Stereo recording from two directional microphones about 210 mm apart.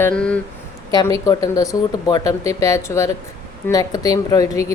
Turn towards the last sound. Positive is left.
turn(degrees=15)  # may be behind; listen again after turning